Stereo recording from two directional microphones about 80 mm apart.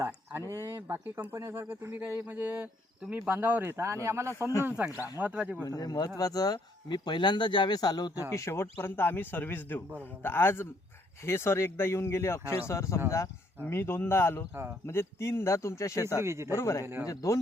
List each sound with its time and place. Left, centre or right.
0.5 s speech: right
3.7 s speech: right
4.8 s speech: right
5.6 s speech: left
6.8 s a man's voice: left
8.3 s speech: left
16.2 s speech: right
16.5 s speech: left